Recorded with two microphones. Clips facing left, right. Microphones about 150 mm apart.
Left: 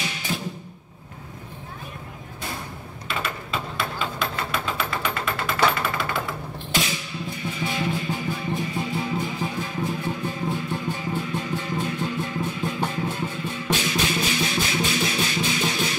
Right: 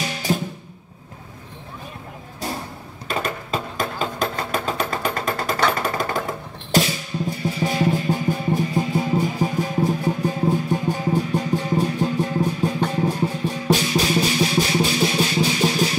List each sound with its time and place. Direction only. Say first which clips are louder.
0.3 s music: right 8 dB; 40° right (ahead or behind)
3.1 s a sound: right 5 dB; 40° right (ahead or behind)
5.7 s music: right 3 dB; 40° right (ahead or behind)